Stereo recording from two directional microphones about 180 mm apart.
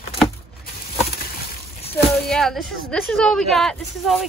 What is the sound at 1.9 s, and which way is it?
A woman's voice, 5° left (ahead or behind).